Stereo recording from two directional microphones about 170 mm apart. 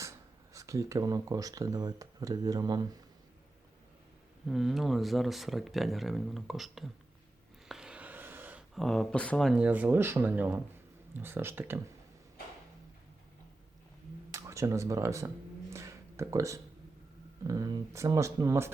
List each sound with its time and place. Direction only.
0.5 s speech: 20° right (ahead or behind)
4.4 s speech: centre (ahead or behind)
14.3 s speech: 20° right (ahead or behind)
15.7 s a sound: 15° right (ahead or behind)
17.4 s speech: 20° right (ahead or behind)